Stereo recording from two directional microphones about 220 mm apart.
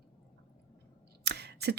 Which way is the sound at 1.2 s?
50° right (ahead or behind).